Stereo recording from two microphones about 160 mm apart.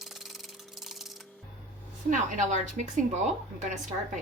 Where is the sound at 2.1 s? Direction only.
50° right (ahead or behind).